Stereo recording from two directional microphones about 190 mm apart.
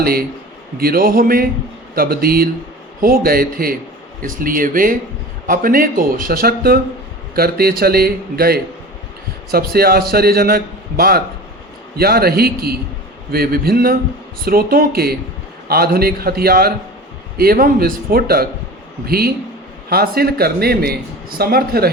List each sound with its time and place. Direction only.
0.0 s a man's voice: 55° right (ahead or behind)